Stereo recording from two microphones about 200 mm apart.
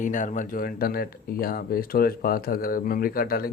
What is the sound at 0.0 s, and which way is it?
Speech, 40° left (ahead or behind).